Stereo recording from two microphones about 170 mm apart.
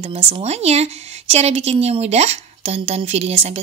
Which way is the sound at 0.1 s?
35° right (ahead or behind).